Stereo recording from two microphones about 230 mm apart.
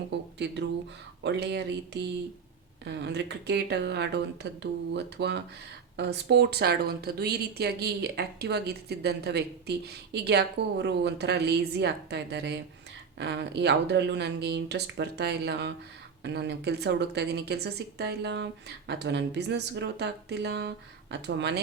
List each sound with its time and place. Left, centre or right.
0.1 s speech: right